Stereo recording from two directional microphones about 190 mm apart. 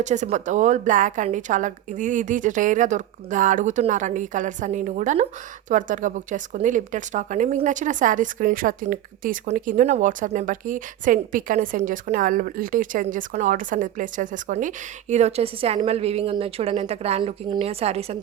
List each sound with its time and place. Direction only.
0.0 s a woman's voice: 40° right (ahead or behind)